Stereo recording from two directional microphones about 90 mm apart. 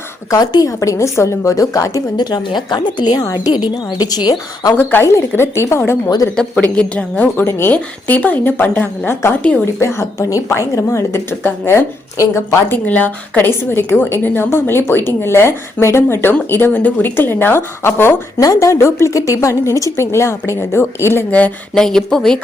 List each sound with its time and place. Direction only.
0.3 s a woman's voice: 45° left (ahead or behind)
2.1 s a woman's voice: 55° left (ahead or behind)
4.8 s a woman's voice: 25° left (ahead or behind)
6.3 s a woman's voice: 10° left (ahead or behind)
9.8 s a woman's voice: 30° left (ahead or behind)
12.7 s a woman's voice: 20° left (ahead or behind)
18.3 s a woman's voice: 35° left (ahead or behind)
21.2 s speech: 15° left (ahead or behind)
21.8 s speech: 5° left (ahead or behind)